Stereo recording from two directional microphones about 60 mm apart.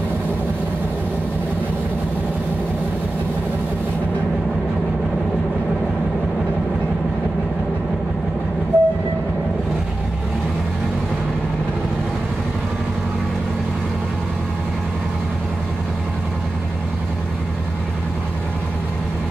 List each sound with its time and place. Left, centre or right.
8.7 s train: right